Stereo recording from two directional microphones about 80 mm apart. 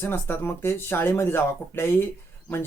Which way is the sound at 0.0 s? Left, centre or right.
Left.